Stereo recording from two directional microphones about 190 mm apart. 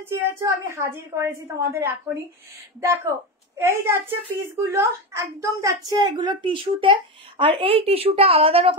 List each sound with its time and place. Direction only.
0.0 s a woman's voice: 15° right (ahead or behind); by 8.7 s 30° right (ahead or behind)